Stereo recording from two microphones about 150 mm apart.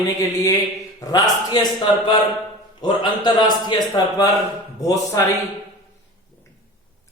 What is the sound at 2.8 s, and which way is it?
Speech, 30° left (ahead or behind).